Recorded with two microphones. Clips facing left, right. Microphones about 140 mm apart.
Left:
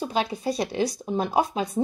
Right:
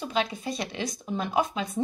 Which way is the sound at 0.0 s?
35° left (ahead or behind).